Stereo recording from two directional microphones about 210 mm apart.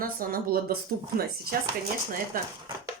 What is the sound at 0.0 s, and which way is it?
Speech, 45° right (ahead or behind).